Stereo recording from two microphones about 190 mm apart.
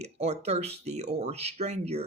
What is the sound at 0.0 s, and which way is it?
Speech, 35° right (ahead or behind).